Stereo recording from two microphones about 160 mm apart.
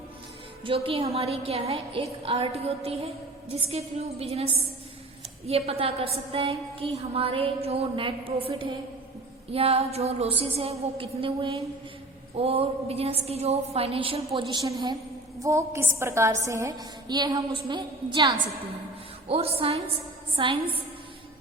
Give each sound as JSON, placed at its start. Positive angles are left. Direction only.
{"t": 0.6, "sound": "a woman's voice", "side_deg": -35}
{"t": 14.5, "sound": "a woman's voice", "side_deg": -25}
{"t": 19.3, "sound": "a woman's voice", "side_deg": -35}